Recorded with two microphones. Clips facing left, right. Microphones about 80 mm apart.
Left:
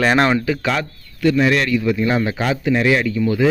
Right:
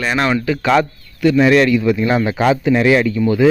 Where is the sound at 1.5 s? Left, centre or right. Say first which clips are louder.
Right 5 dB; right.